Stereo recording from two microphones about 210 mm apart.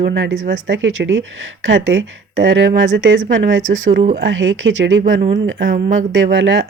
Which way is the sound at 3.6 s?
35° right (ahead or behind).